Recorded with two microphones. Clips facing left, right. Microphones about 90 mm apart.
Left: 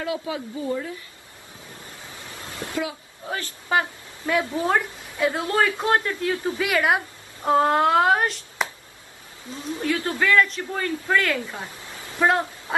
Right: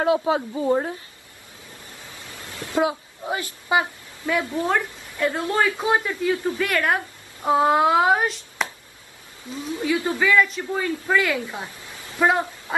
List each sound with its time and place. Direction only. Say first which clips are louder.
0.0 s speech: right 8 dB; 35° right (ahead or behind)
2.7 s speech: right 8 dB; 25° right (ahead or behind)
3.3 s speech: right 1 dB; 15° right (ahead or behind)
4.4 s a woman's voice: left 1 dB; 15° left (ahead or behind)
5.3 s a woman's voice: right 1 dB; centre (ahead or behind)
7.4 s a woman's voice: right 1 dB; 5° right (ahead or behind)
9.8 s speech: right 2 dB; 15° right (ahead or behind)